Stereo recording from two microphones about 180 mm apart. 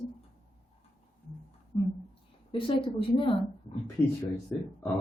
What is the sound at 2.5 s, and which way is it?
Speech, 30° left (ahead or behind).